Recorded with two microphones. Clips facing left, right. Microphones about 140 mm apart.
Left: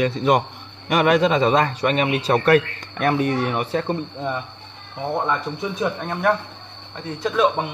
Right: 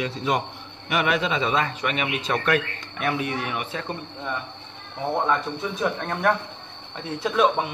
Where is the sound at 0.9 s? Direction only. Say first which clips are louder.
Left 7 dB; 45° left (ahead or behind).